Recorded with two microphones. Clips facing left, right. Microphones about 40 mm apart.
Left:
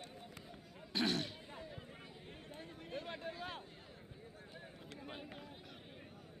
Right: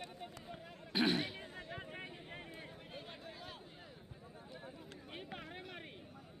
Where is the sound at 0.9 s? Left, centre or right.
Centre.